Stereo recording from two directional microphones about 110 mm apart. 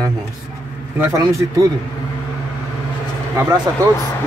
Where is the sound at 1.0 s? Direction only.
30° right (ahead or behind).